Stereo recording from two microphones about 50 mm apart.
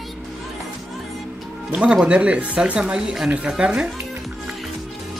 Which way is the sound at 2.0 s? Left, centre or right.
Right.